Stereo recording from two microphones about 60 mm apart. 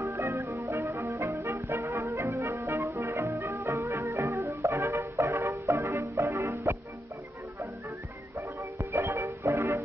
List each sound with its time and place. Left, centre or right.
0.0 s music: right
8.9 s music: right